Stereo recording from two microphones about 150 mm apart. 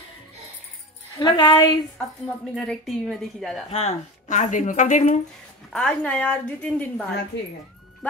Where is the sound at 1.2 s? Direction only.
30° left (ahead or behind).